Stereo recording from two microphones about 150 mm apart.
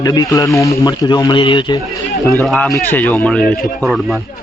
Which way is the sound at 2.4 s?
Centre (ahead or behind).